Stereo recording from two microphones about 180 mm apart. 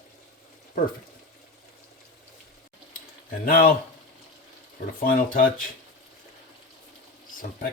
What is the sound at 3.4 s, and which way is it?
Speech, 55° left (ahead or behind).